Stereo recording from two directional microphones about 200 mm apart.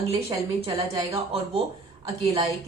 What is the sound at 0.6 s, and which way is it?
A woman's voice, 30° right (ahead or behind).